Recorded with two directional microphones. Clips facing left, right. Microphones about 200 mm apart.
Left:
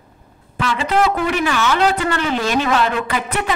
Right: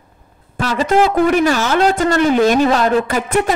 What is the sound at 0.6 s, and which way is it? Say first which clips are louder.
A man's voice: right 4 dB; 40° right (ahead or behind).